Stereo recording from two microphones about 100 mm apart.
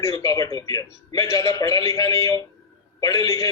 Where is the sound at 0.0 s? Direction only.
35° left (ahead or behind).